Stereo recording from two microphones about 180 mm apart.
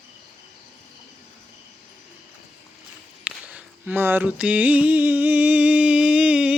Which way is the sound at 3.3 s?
5° right (ahead or behind).